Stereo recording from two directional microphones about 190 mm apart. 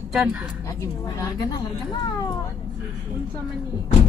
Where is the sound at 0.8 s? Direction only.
15° left (ahead or behind).